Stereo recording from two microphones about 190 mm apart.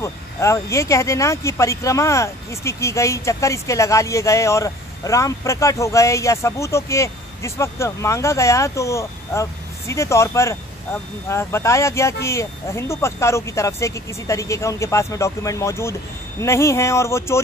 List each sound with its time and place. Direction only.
0.0 s speech: 15° left (ahead or behind)